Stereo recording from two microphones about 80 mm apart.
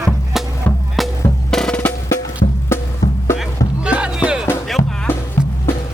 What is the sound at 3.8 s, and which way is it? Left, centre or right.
Music, centre.